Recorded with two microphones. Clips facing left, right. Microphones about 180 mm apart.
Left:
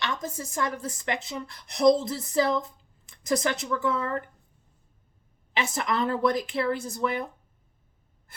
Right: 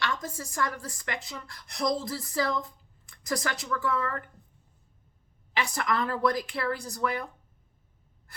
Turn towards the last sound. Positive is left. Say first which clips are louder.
# left 2 dB
turn(degrees=25)  # may be behind; listen again after turning